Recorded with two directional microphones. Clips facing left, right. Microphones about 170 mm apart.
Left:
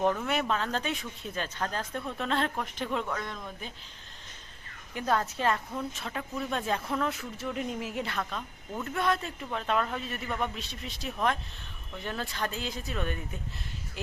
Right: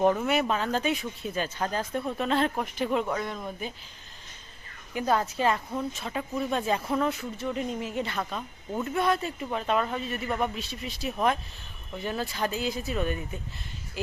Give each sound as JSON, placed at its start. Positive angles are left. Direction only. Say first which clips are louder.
{"t": 0.0, "sound": "speech", "louder": "right 4 dB", "side_deg": -10}
{"t": 4.9, "sound": "speech", "louder": "right 3 dB", "side_deg": -5}
{"t": 8.2, "sound": "speech", "louder": "right 2 dB", "side_deg": -10}